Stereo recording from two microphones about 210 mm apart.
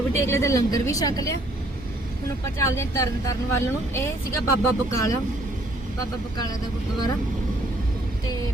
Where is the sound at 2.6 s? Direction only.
15° left (ahead or behind).